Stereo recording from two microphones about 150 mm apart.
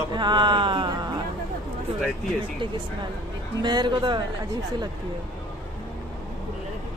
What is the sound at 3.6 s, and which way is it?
Speech, 30° right (ahead or behind).